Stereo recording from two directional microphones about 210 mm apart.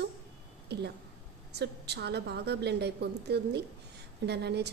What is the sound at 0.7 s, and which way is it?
A woman's voice, 50° right (ahead or behind).